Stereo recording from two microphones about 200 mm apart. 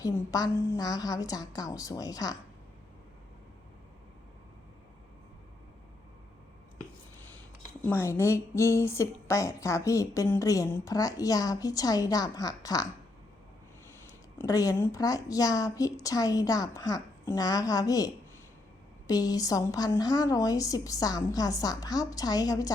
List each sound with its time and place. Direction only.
0.0 s a woman's voice: 20° left (ahead or behind)
7.9 s a woman's voice: 10° left (ahead or behind)
14.3 s a woman's voice: 15° left (ahead or behind)